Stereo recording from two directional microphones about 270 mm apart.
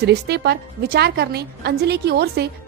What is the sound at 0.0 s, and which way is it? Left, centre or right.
A woman's voice, right.